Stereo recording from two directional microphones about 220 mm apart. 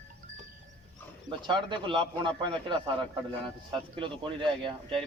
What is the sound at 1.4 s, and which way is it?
A man's voice, 20° right (ahead or behind).